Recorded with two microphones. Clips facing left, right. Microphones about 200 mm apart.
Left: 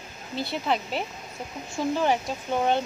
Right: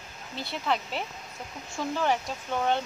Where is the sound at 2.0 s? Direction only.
20° left (ahead or behind).